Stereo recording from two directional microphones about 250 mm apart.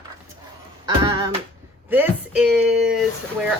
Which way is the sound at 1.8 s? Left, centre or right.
Centre.